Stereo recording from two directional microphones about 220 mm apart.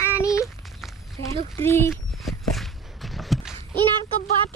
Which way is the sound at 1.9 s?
Centre (ahead or behind).